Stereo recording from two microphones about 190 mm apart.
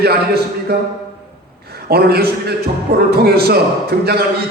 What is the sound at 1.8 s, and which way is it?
A man's voice, 55° right (ahead or behind).